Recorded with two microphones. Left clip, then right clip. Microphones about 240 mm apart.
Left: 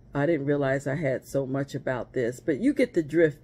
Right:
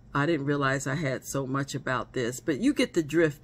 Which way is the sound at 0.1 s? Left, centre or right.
Centre.